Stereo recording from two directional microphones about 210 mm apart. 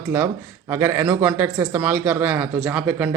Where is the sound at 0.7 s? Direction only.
10° right (ahead or behind).